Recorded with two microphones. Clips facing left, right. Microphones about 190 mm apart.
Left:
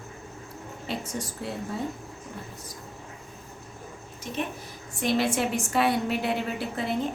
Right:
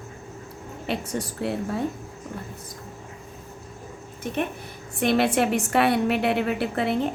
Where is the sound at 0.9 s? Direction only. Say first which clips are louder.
Right 5 dB; 65° right (ahead or behind).